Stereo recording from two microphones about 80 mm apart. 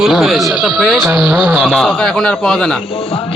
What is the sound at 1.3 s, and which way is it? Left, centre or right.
Speech, centre.